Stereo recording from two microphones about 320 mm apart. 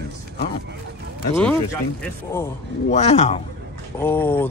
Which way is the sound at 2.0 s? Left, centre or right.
Centre.